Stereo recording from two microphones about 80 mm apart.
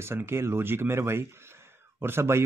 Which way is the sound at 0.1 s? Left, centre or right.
Right.